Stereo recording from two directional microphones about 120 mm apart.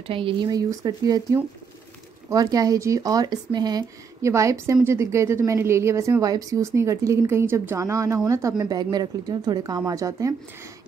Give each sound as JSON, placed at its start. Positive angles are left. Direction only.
{"t": 0.0, "sound": "speech", "side_deg": -50}
{"t": 2.2, "sound": "speech", "side_deg": -30}
{"t": 4.2, "sound": "a woman's voice", "side_deg": -25}